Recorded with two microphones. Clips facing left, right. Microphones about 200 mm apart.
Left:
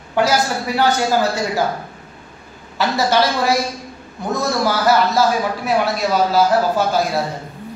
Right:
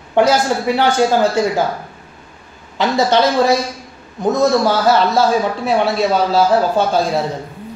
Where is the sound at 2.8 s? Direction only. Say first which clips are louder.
Right 3 dB; 20° right (ahead or behind).